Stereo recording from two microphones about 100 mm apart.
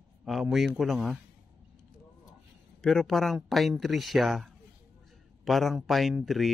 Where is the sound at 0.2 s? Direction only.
Centre (ahead or behind).